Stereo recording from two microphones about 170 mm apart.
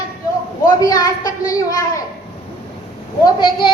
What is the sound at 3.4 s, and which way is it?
Speech, 25° left (ahead or behind).